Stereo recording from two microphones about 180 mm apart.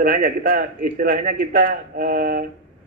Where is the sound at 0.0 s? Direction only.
50° right (ahead or behind).